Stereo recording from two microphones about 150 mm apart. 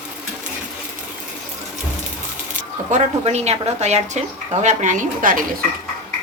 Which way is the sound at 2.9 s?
45° right (ahead or behind).